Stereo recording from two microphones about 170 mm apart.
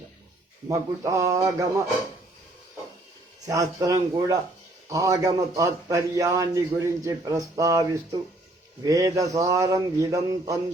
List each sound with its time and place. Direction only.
0.7 s a man's voice: 20° right (ahead or behind)
3.4 s a man's voice: 20° right (ahead or behind)